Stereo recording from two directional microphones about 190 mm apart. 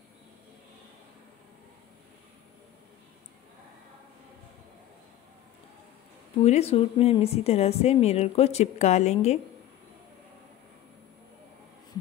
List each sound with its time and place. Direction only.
6.4 s speech: 35° left (ahead or behind)